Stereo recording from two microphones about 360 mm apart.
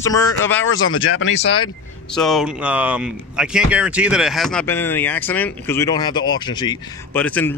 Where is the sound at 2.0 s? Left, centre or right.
Centre.